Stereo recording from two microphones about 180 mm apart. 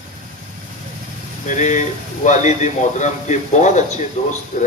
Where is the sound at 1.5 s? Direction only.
45° left (ahead or behind).